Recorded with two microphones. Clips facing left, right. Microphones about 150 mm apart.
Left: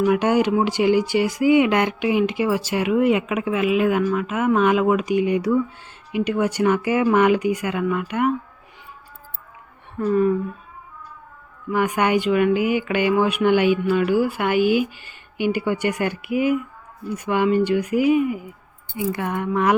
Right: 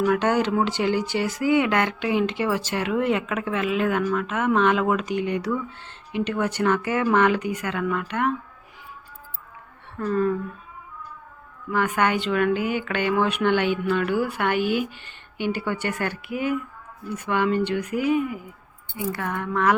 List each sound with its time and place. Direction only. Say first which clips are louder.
0.0 s speech: left 3 dB; 15° left (ahead or behind)
10.0 s speech: left 4 dB; 10° left (ahead or behind)
11.7 s speech: left 3 dB; 15° left (ahead or behind)